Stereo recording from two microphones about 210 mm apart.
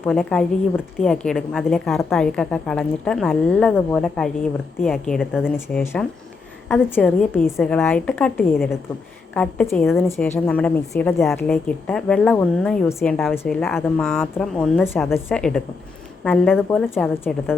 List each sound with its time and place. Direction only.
0.0 s a woman's voice: 5° left (ahead or behind)
5.5 s a woman's voice: 10° left (ahead or behind)